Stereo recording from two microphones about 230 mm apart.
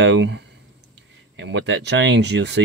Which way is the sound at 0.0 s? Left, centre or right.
Right.